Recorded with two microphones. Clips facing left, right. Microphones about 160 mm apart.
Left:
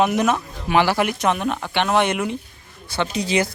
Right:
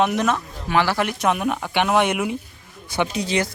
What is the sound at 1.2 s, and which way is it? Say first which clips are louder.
Speech: even; 5° right (ahead or behind).